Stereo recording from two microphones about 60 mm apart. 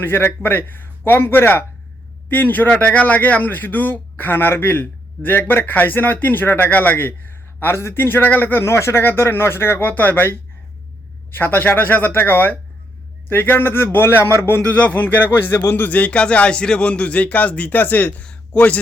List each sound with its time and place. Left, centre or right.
0.0 s a man's voice: left